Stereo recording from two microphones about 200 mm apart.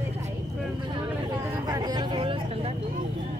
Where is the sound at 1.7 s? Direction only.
20° right (ahead or behind).